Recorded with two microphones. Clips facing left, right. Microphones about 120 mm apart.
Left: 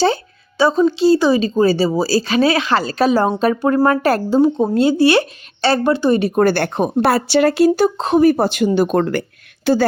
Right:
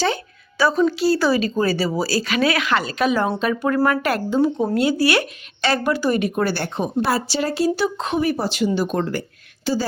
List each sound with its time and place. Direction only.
0.0 s speech: 30° left (ahead or behind)
4.4 s speech: 20° left (ahead or behind)
6.4 s speech: 55° left (ahead or behind)
7.9 s a woman's voice: 35° left (ahead or behind); by 9.8 s 60° left (ahead or behind)